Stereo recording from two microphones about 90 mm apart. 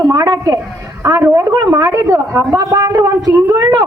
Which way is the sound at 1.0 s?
35° right (ahead or behind).